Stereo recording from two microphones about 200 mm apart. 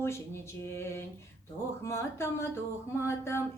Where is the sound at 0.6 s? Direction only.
15° left (ahead or behind).